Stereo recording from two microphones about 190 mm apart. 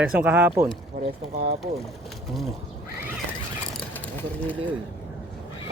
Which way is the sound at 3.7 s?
10° left (ahead or behind).